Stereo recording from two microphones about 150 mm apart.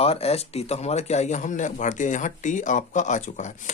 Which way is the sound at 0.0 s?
40° left (ahead or behind).